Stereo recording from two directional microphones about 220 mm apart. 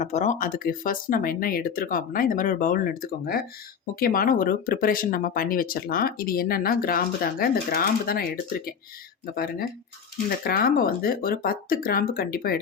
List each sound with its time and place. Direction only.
0.0 s speech: 30° left (ahead or behind)